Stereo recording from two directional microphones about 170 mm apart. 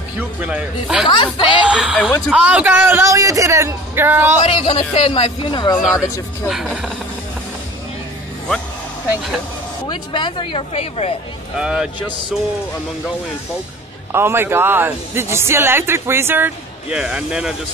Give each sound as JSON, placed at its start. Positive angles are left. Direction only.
{"t": 0.2, "sound": "speech", "side_deg": -10}
{"t": 1.0, "sound": "speech", "side_deg": 30}
{"t": 1.6, "sound": "a sound", "side_deg": -5}
{"t": 2.0, "sound": "speech", "side_deg": 10}
{"t": 2.3, "sound": "speech", "side_deg": -10}
{"t": 4.5, "sound": "speech", "side_deg": 35}
{"t": 6.5, "sound": "speech", "side_deg": 0}
{"t": 9.8, "sound": "speech", "side_deg": 25}
{"t": 11.5, "sound": "speech", "side_deg": -5}
{"t": 14.1, "sound": "speech", "side_deg": -15}